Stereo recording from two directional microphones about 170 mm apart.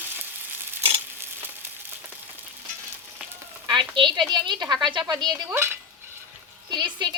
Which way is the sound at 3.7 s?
30° right (ahead or behind).